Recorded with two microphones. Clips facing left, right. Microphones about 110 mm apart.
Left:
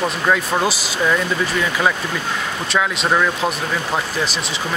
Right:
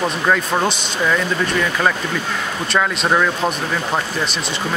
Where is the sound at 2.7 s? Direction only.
Centre (ahead or behind).